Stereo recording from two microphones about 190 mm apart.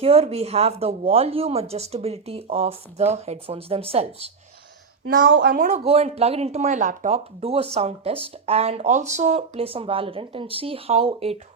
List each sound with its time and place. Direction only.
0.0 s speech: 30° right (ahead or behind)
5.0 s speech: 50° right (ahead or behind)
5.6 s speech: 35° right (ahead or behind)